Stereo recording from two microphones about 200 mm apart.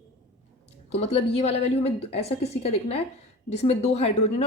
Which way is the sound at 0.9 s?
30° left (ahead or behind).